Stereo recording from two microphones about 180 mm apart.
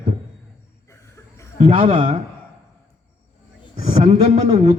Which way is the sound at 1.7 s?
30° right (ahead or behind).